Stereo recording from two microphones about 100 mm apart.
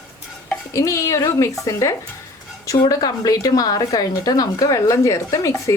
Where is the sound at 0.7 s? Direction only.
30° left (ahead or behind).